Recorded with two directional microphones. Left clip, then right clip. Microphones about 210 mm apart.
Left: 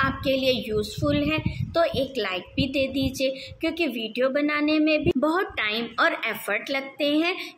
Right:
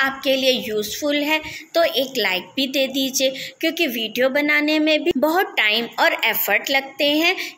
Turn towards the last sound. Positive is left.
turn(degrees=5)  # may be behind; listen again after turning